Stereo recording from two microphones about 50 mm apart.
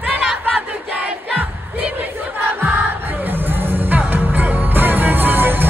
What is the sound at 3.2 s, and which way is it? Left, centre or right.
Music, right.